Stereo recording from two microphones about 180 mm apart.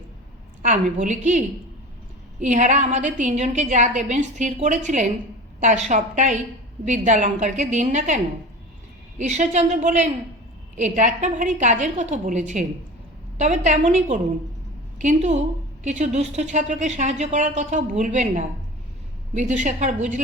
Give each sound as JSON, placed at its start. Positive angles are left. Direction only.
{"t": 0.6, "sound": "a woman's voice", "side_deg": -45}